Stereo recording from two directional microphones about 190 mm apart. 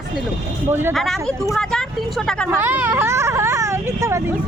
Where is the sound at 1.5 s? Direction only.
5° left (ahead or behind).